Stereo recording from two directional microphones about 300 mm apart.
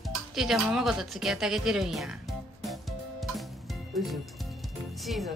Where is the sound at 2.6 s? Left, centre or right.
Centre.